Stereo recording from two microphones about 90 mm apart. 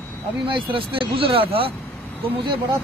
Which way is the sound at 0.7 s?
85° right.